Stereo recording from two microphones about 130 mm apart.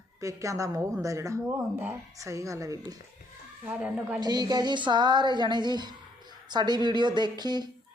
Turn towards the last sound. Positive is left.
turn(degrees=-35)  # may be behind; listen again after turning